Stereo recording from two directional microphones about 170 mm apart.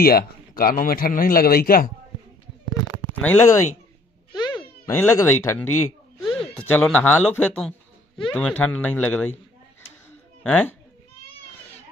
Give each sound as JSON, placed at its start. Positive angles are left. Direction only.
{"t": 0.0, "sound": "a man's voice", "side_deg": 60}
{"t": 3.2, "sound": "speech", "side_deg": 10}
{"t": 4.4, "sound": "meow", "side_deg": 25}
{"t": 4.9, "sound": "speech", "side_deg": 15}
{"t": 6.2, "sound": "cat", "side_deg": 0}
{"t": 6.6, "sound": "speech", "side_deg": 5}
{"t": 10.4, "sound": "speech", "side_deg": 10}